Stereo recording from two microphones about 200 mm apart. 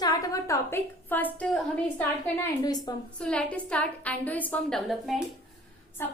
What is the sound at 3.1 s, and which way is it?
A woman's voice, 5° left (ahead or behind).